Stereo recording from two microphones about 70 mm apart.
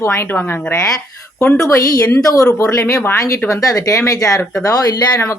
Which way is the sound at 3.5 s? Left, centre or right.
Left.